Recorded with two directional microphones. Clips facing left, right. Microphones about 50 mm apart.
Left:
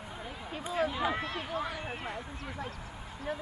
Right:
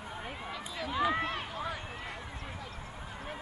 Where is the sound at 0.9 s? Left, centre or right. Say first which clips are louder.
Right 2 dB; centre.